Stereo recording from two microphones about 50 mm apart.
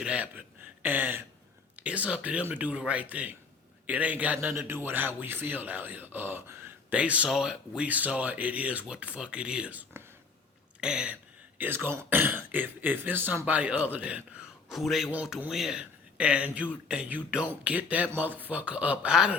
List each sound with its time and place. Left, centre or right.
0.0 s speech: right
2.4 s speech: right
4.5 s a man's voice: right
6.9 s speech: right
7.3 s speech: centre
7.9 s speech: right
10.0 s a sound: right
10.8 s a sound: centre
11.7 s speech: right
13.4 s speech: right
14.7 s speech: centre
15.7 s speech: right
19.0 s speech: centre